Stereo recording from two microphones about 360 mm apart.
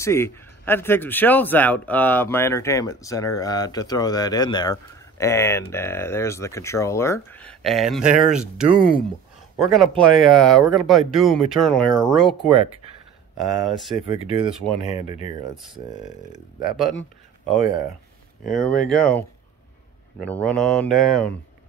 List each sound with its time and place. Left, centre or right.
0.0 s speech: centre
13.4 s speech: centre
14.0 s speech: centre
14.9 s speech: centre
15.5 s speech: centre
17.6 s speech: left
18.9 s speech: centre
20.2 s speech: centre